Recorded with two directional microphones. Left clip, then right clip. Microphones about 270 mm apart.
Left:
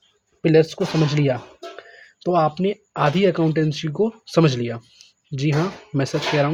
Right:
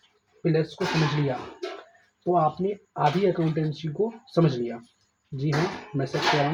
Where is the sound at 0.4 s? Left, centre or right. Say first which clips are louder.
Left 10 dB; left.